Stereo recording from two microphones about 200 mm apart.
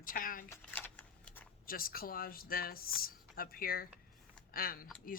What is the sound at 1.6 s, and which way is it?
Speech, 45° left (ahead or behind).